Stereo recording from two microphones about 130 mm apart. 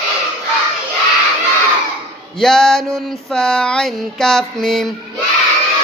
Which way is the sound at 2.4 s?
5° left (ahead or behind).